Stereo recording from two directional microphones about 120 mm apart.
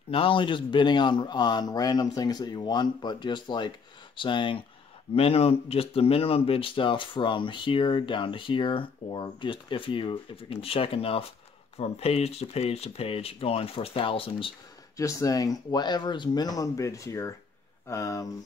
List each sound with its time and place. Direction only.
0.1 s speech: 45° left (ahead or behind)
5.1 s speech: 55° left (ahead or behind)
15.0 s speech: 25° left (ahead or behind)